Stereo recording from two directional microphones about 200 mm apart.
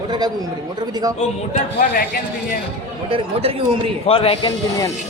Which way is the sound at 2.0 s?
45° left (ahead or behind).